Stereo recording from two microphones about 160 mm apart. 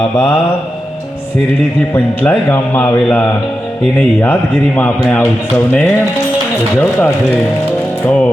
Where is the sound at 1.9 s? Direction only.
10° left (ahead or behind).